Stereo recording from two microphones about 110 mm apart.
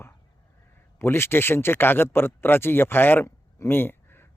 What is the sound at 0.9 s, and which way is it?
Speech, 20° left (ahead or behind).